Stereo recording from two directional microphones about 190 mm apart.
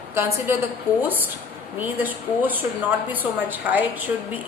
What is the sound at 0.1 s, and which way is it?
Speech, 15° right (ahead or behind).